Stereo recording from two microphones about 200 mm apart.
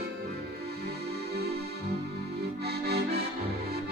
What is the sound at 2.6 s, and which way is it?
Accordion, 55° right (ahead or behind).